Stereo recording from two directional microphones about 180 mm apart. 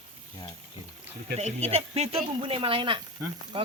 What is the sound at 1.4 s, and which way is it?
Speech, 35° right (ahead or behind).